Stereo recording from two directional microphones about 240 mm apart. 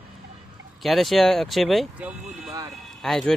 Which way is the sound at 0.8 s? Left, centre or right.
Centre.